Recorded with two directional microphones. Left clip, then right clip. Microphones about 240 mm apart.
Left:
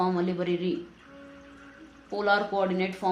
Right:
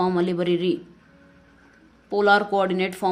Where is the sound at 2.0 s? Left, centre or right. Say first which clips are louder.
Right 7 dB; right.